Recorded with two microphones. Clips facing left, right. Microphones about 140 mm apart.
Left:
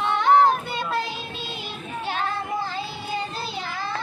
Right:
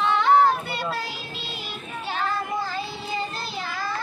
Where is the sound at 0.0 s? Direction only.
20° left (ahead or behind).